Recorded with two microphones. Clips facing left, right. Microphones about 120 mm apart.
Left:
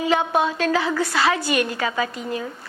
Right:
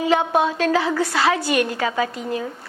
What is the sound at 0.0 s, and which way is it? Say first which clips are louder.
A woman's voice: right 2 dB; 50° right (ahead or behind).